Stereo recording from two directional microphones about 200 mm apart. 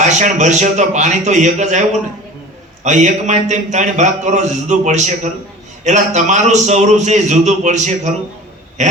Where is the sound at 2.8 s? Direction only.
35° right (ahead or behind).